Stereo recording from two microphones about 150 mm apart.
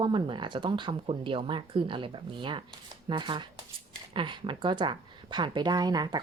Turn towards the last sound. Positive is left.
turn(degrees=-25)  # may be behind; listen again after turning